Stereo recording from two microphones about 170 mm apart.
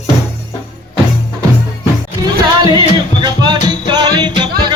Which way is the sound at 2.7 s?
25° right (ahead or behind).